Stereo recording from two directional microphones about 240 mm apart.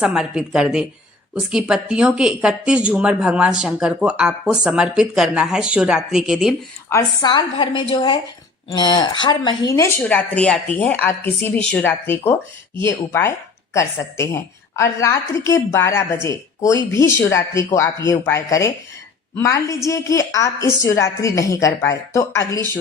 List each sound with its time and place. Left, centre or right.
0.0 s speech: centre
6.9 s a woman's voice: centre